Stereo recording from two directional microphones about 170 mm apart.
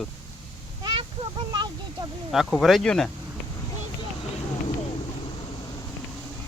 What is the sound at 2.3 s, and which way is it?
Speech, centre (ahead or behind).